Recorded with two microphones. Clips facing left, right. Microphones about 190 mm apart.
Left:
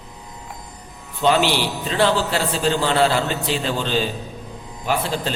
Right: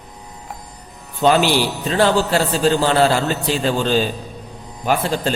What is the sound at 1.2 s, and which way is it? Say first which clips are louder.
A man's voice: right 3 dB; 45° right (ahead or behind).